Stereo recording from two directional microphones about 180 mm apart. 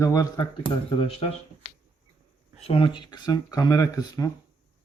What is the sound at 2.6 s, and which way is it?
Speech, 30° left (ahead or behind).